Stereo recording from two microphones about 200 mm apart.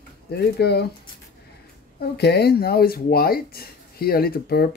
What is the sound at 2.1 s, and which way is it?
Speech, 55° left (ahead or behind).